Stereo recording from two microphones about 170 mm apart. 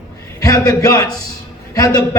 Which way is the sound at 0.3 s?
20° left (ahead or behind).